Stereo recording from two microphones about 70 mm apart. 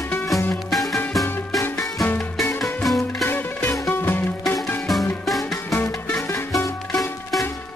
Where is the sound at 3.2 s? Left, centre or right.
Left.